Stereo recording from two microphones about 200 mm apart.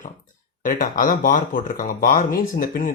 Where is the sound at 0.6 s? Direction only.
40° left (ahead or behind).